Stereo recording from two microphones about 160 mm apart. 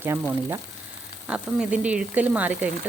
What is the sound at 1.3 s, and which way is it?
Speech, 5° right (ahead or behind).